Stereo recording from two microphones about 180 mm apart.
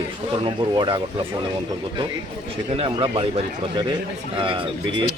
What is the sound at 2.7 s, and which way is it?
A man's voice, 30° right (ahead or behind).